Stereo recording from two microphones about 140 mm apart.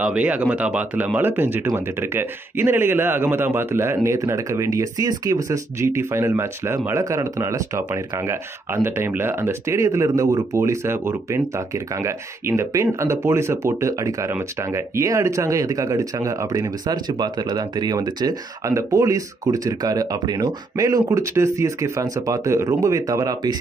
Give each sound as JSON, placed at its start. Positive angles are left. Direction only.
{"t": 0.0, "sound": "speech", "side_deg": -10}